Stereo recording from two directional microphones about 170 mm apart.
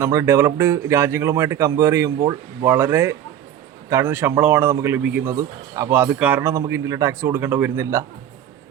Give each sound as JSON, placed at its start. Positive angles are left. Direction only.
{"t": 0.0, "sound": "a man's voice", "side_deg": -15}
{"t": 2.1, "sound": "speech", "side_deg": -25}
{"t": 2.6, "sound": "a man's voice", "side_deg": -15}